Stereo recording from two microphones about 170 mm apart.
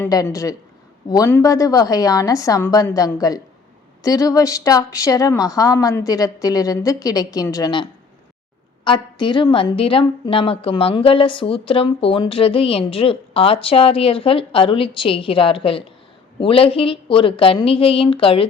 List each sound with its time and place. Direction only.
0.0 s a woman's voice: 20° left (ahead or behind)